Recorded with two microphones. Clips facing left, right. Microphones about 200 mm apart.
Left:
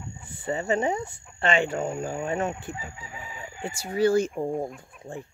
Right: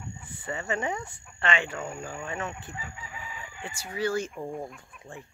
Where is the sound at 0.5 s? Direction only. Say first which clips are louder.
Left 6 dB; 30° left (ahead or behind).